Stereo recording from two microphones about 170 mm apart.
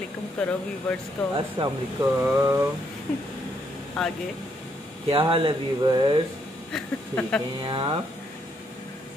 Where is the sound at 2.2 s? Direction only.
15° right (ahead or behind).